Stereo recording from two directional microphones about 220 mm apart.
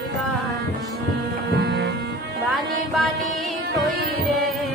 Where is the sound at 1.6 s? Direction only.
45° right (ahead or behind).